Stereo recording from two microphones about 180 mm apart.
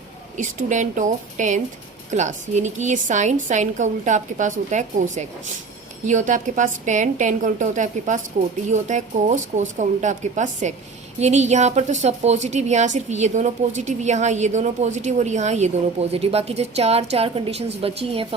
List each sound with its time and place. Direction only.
0.3 s a woman's voice: 45° right (ahead or behind)